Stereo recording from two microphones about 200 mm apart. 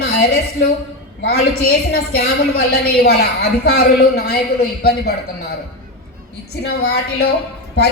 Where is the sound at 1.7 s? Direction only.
50° left (ahead or behind).